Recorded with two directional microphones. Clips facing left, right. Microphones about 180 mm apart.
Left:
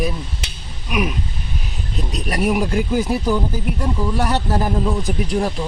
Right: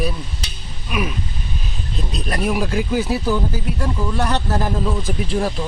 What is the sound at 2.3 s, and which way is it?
Speech, 15° left (ahead or behind).